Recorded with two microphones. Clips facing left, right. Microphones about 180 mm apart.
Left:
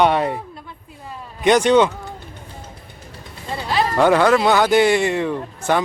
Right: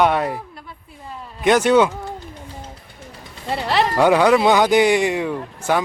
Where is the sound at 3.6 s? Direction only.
70° right (ahead or behind).